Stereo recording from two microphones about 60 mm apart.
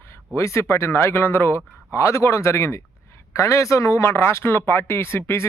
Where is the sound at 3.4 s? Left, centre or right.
Left.